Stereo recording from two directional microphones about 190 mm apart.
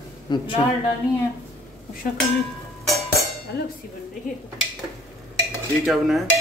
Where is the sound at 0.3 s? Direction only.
20° left (ahead or behind).